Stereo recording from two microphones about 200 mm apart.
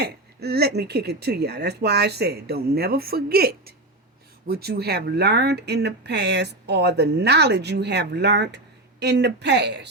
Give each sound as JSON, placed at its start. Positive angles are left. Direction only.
{"t": 0.0, "sound": "speech", "side_deg": -55}